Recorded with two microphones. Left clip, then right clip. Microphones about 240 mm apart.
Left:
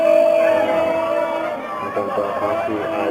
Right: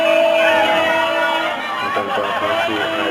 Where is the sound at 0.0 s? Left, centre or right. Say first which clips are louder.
Even; centre.